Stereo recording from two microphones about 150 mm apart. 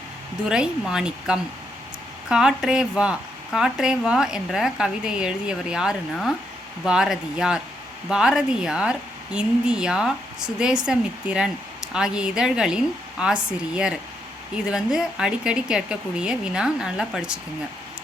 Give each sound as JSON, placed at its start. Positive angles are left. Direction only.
{"t": 0.4, "sound": "speech", "side_deg": -5}